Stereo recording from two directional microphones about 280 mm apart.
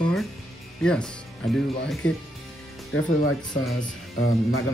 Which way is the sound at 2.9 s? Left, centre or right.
Left.